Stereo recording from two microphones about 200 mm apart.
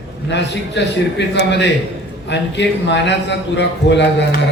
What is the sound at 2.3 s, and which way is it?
A man's voice, 60° left (ahead or behind).